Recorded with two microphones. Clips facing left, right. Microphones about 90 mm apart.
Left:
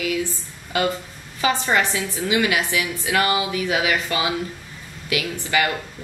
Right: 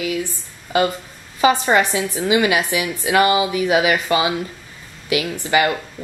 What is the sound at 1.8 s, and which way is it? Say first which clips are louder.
A woman's voice: right 4 dB; 10° right (ahead or behind).